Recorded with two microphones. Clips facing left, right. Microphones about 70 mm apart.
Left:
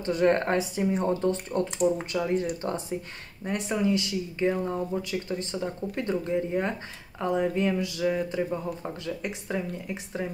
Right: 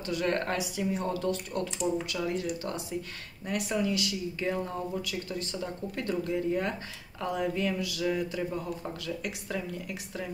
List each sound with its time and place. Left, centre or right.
0.0 s speech: left